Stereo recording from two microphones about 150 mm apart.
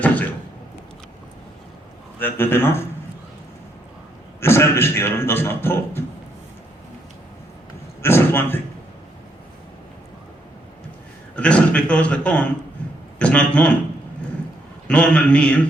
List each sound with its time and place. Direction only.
0.0 s a sound: 10° left (ahead or behind)
2.1 s a man's voice: 15° left (ahead or behind)
4.4 s a man's voice: 15° left (ahead or behind)
8.0 s a man's voice: 15° left (ahead or behind)
11.3 s a man's voice: 10° left (ahead or behind)
14.8 s a man's voice: 5° left (ahead or behind)